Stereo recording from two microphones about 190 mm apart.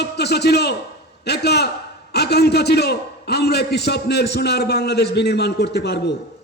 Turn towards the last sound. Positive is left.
turn(degrees=60)  # may be behind; listen again after turning